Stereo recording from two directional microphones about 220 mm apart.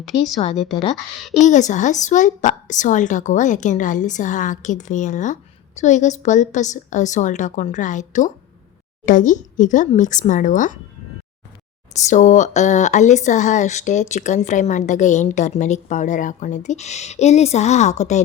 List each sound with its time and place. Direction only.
0.3 s a woman's voice: 30° left (ahead or behind)
11.9 s a woman's voice: 35° left (ahead or behind)